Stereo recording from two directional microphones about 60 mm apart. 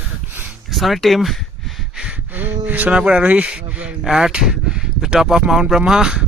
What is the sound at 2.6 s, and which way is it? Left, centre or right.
Speech, right.